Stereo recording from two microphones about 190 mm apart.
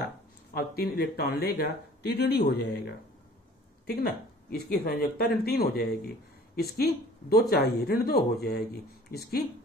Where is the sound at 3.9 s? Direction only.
55° left (ahead or behind).